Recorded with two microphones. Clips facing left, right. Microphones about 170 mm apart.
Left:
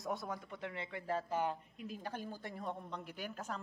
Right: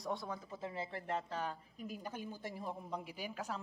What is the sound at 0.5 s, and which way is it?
Speech, 25° right (ahead or behind).